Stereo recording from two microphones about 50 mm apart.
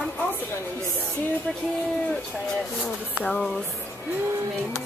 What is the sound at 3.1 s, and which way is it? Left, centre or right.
Speech, left.